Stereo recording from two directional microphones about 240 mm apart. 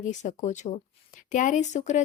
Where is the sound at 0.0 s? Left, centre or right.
Left.